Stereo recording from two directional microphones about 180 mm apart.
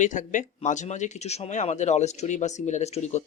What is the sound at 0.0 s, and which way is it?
Speech, 45° left (ahead or behind).